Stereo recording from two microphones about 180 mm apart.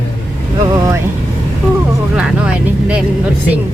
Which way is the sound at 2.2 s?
5° right (ahead or behind).